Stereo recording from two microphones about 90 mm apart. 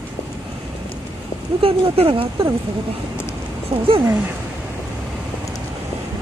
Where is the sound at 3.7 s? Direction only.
75° right (ahead or behind).